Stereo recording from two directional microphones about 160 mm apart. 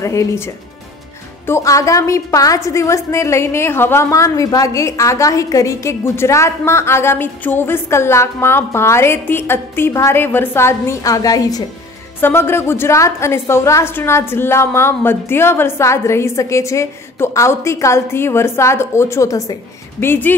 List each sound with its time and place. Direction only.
0.0 s a woman's voice: 20° left (ahead or behind)